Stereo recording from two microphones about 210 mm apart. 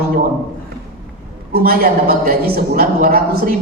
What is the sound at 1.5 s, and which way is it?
A woman's voice, 45° right (ahead or behind).